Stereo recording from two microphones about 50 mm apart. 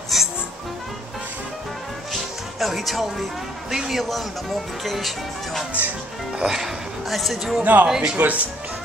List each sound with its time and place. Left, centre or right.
0.1 s music: centre
2.6 s speech: centre
4.0 s speech: centre
7.6 s speech: right
7.9 s speech: centre
8.2 s speech: right